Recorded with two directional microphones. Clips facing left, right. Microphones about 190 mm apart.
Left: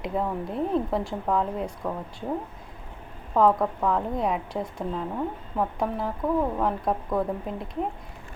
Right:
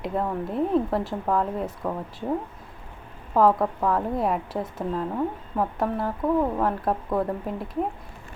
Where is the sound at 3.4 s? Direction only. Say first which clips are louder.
Right 1 dB; centre (ahead or behind).